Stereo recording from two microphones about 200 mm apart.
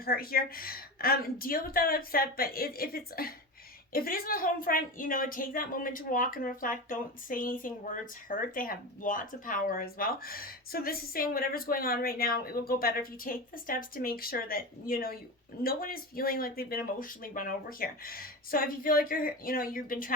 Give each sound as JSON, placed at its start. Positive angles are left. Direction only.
{"t": 0.0, "sound": "speech", "side_deg": 45}